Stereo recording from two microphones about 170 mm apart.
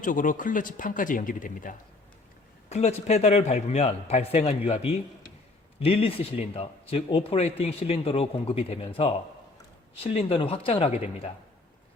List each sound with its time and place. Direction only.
0.0 s speech: 50° left (ahead or behind)
2.6 s speech: 40° left (ahead or behind)